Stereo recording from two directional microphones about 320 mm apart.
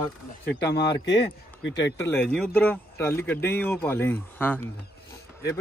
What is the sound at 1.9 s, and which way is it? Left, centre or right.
Speech, centre.